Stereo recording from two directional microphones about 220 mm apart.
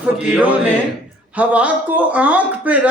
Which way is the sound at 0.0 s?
5° right (ahead or behind).